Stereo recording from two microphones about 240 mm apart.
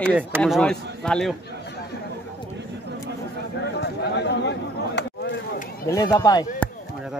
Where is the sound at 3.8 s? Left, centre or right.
Left.